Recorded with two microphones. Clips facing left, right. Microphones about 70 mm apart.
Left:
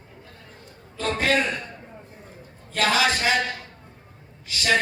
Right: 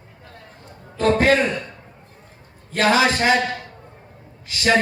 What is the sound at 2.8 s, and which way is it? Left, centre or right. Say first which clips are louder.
Speech: right 4 dB; right.